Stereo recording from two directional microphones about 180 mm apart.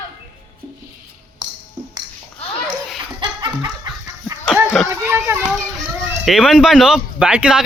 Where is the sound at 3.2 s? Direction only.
25° right (ahead or behind).